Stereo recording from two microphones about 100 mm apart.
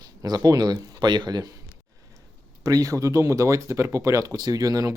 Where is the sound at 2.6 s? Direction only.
35° right (ahead or behind).